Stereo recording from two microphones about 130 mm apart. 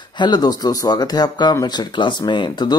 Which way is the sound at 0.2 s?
35° left (ahead or behind).